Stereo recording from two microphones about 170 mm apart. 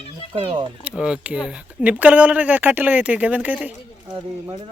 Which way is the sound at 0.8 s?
5° right (ahead or behind).